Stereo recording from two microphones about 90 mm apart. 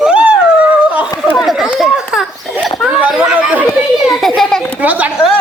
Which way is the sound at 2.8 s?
10° right (ahead or behind).